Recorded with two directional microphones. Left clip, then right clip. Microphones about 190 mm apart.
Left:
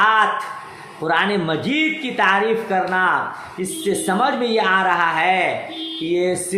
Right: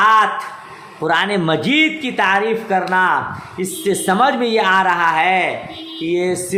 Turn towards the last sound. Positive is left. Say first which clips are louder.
# right 1 dB
turn(degrees=-20)  # may be behind; listen again after turning